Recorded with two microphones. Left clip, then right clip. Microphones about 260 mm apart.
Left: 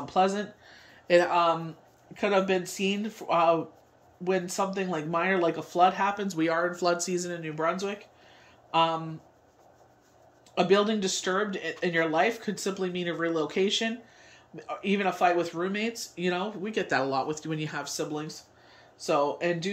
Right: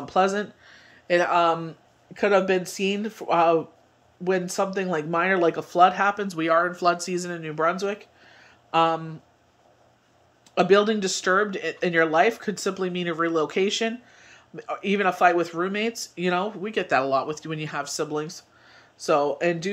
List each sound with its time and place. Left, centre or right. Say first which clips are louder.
0.0 s speech: right 3 dB; centre
0.7 s speech: even; centre
10.5 s speech: right 5 dB; centre